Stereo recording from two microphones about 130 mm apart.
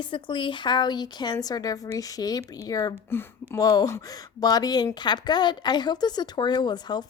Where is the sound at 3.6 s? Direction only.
30° left (ahead or behind).